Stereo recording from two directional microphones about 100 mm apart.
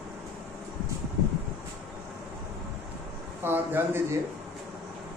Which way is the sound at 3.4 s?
20° right (ahead or behind).